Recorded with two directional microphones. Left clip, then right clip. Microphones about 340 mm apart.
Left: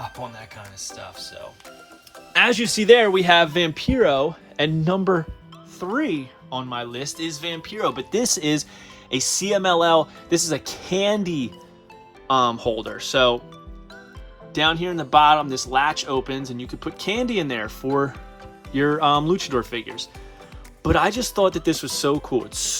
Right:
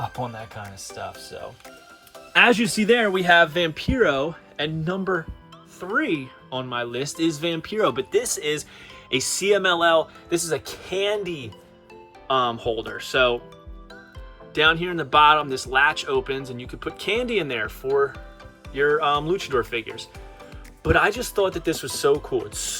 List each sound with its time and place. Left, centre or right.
2.3 s speech: centre
14.5 s speech: centre